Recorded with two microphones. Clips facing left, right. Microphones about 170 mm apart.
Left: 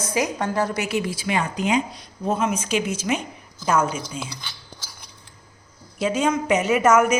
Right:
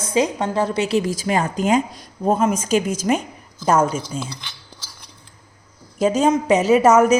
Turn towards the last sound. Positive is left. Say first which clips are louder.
# right 4 dB
turn(degrees=-35)  # may be behind; listen again after turning